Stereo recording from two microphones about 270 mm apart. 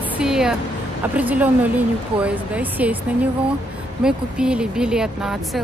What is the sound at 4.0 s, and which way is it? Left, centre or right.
Speech, centre.